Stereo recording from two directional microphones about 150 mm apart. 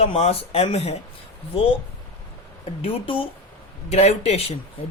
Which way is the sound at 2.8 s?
35° left (ahead or behind).